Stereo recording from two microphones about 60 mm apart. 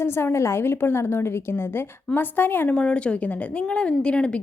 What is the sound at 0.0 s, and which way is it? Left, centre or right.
A woman's voice, left.